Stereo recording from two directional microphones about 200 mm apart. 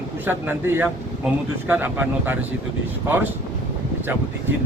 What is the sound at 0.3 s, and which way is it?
Speech, 10° right (ahead or behind).